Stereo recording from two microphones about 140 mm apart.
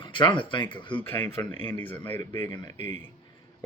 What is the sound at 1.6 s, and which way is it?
Speech, 15° left (ahead or behind).